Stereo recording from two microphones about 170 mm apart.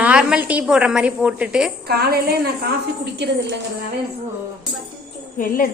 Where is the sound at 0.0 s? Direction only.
5° right (ahead or behind).